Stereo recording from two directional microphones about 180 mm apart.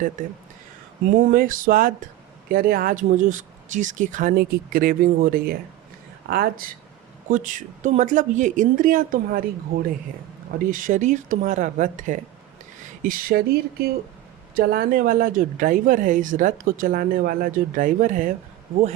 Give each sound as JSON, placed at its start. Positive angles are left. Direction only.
{"t": 1.0, "sound": "speech", "side_deg": -45}
{"t": 7.3, "sound": "speech", "side_deg": -45}